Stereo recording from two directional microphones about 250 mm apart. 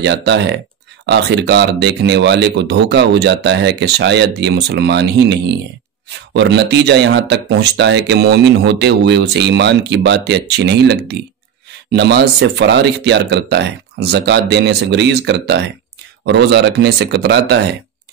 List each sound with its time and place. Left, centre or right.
0.0 s speech: right